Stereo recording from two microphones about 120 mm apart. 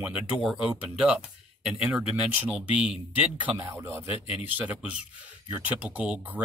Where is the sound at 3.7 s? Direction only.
20° right (ahead or behind).